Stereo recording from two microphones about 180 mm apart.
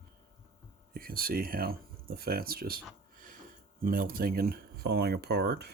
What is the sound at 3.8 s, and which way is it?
Speech, 55° right (ahead or behind).